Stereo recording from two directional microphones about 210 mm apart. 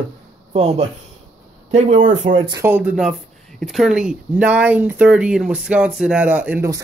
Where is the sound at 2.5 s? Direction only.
10° right (ahead or behind).